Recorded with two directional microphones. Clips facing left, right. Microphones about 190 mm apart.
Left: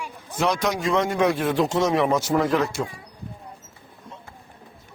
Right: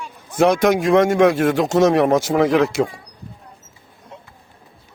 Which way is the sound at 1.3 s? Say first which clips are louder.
Right 6 dB; 80° right.